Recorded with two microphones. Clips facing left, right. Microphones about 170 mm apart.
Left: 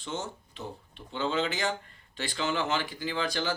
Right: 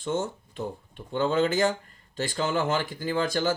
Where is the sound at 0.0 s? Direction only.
50° right (ahead or behind).